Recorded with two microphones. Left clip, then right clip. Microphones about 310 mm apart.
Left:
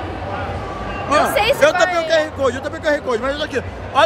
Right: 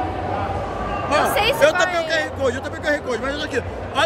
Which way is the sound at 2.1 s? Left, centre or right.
Centre.